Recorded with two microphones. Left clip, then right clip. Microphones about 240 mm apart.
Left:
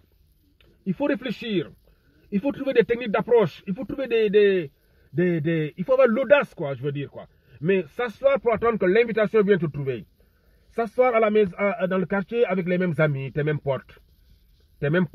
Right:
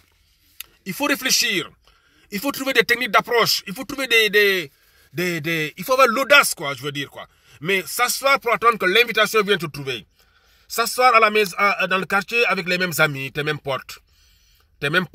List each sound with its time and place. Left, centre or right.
1.0 s speech: centre
2.2 s a man's voice: right
3.9 s a man's voice: centre
6.4 s a man's voice: right
14.8 s speech: right